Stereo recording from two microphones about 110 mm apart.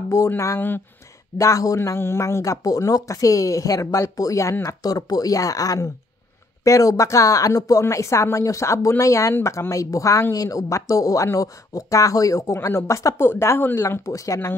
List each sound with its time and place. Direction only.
0.4 s speech: 25° left (ahead or behind)
1.4 s speech: 30° left (ahead or behind)